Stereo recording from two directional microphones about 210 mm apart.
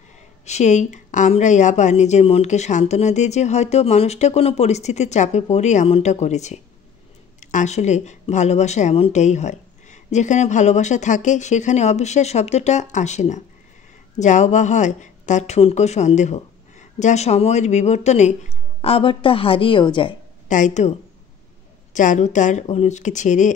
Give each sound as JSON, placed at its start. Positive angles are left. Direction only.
{"t": 0.5, "sound": "a woman's voice", "side_deg": 35}
{"t": 20.4, "sound": "a woman's voice", "side_deg": 35}
{"t": 21.9, "sound": "a woman's voice", "side_deg": 35}